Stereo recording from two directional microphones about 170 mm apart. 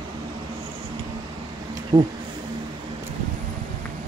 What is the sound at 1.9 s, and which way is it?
Speech, 25° right (ahead or behind).